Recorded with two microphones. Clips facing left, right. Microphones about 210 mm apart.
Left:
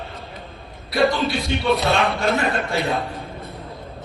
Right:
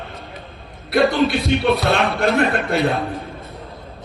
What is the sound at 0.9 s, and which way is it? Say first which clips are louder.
Speech: right 3 dB; 60° right (ahead or behind).